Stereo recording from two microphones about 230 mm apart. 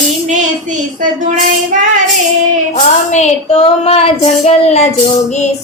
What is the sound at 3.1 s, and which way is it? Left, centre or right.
Female singing, left.